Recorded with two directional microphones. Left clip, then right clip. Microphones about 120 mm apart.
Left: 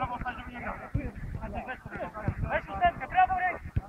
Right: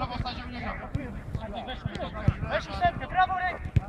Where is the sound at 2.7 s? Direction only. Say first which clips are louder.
Left 1 dB; 55° right (ahead or behind).